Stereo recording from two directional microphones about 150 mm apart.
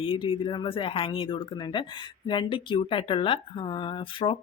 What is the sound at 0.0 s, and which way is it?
Speech, 35° left (ahead or behind).